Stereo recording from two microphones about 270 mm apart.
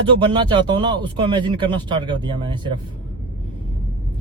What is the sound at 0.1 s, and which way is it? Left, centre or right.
Speech, centre.